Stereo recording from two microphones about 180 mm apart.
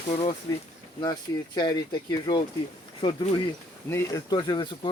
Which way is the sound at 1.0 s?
25° left (ahead or behind).